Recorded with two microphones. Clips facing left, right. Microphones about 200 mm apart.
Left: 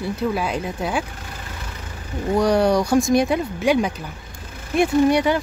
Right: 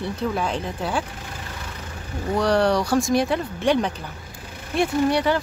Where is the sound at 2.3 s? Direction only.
10° left (ahead or behind).